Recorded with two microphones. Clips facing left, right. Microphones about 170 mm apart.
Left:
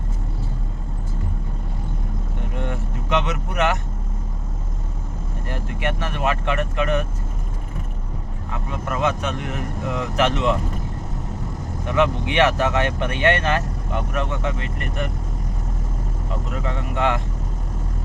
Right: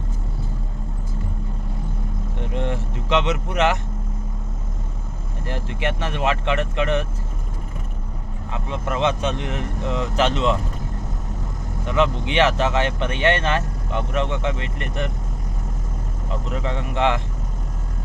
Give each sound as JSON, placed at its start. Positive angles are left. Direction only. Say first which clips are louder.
{"t": 2.6, "sound": "vehicle", "louder": "right 3 dB", "side_deg": -25}
{"t": 3.2, "sound": "speech", "louder": "right 2 dB", "side_deg": -25}
{"t": 5.5, "sound": "speech", "louder": "right 1 dB", "side_deg": -25}
{"t": 8.7, "sound": "speech", "louder": "right 1 dB", "side_deg": -25}
{"t": 11.9, "sound": "speech", "louder": "even", "side_deg": -25}
{"t": 16.6, "sound": "speech", "louder": "right 1 dB", "side_deg": -25}